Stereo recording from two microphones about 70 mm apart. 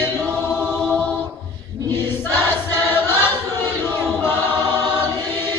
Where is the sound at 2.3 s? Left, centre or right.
Left.